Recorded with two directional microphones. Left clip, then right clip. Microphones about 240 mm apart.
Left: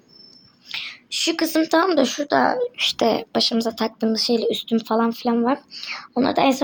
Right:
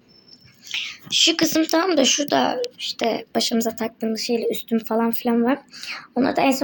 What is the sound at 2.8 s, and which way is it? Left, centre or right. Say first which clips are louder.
Speech: left 4 dB; left.